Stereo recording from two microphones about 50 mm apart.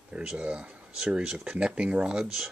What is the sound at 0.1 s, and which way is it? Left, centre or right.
Speech, right.